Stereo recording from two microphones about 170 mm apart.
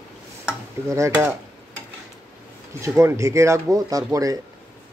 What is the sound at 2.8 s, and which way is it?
Speech, 15° right (ahead or behind).